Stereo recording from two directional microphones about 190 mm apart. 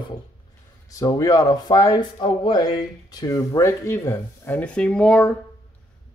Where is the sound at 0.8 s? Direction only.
20° left (ahead or behind).